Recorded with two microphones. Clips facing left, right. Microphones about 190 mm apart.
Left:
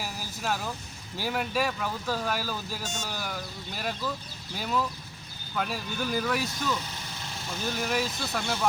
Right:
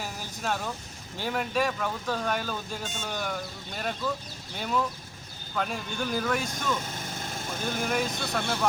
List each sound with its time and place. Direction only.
0.0 s vehicle: 5° left (ahead or behind)
1.2 s speech: 5° left (ahead or behind)
6.7 s vehicle: 50° right (ahead or behind)
7.8 s speech: 5° left (ahead or behind)